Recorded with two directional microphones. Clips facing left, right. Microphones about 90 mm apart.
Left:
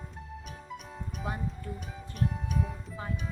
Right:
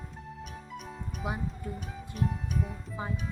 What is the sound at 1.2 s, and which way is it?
Speech, 10° right (ahead or behind).